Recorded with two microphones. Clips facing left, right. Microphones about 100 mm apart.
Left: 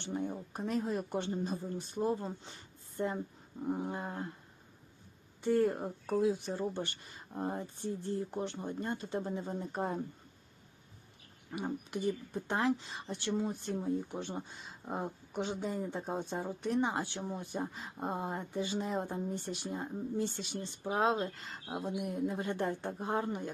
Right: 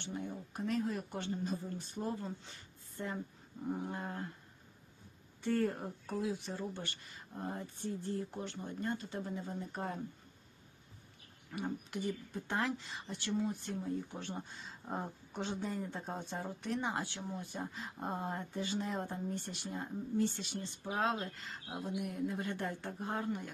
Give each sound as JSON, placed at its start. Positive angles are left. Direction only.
{"t": 0.0, "sound": "speech", "side_deg": 30}
{"t": 5.4, "sound": "speech", "side_deg": 15}
{"t": 11.5, "sound": "speech", "side_deg": 20}
{"t": 14.8, "sound": "speech", "side_deg": 10}